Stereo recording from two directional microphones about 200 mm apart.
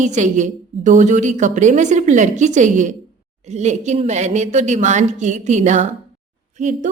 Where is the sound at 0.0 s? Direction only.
35° right (ahead or behind).